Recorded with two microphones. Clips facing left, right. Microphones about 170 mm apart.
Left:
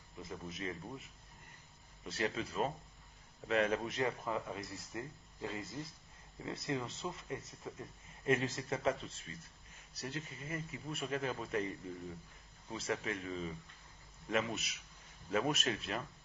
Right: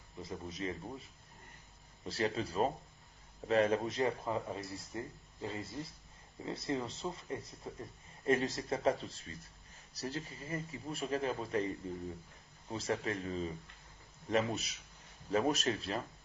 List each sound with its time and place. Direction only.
0.2 s speech: 30° right (ahead or behind)
2.0 s speech: 30° right (ahead or behind)
12.9 s speech: 35° right (ahead or behind)